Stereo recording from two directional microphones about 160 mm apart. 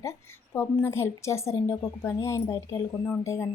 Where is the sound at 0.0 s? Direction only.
15° left (ahead or behind).